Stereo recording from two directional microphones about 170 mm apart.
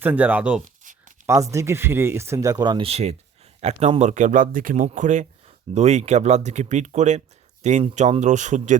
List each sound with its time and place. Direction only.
0.0 s speech: 10° right (ahead or behind)
0.8 s writing: 50° right (ahead or behind)
1.3 s speech: 20° right (ahead or behind); by 8.8 s 45° right (ahead or behind)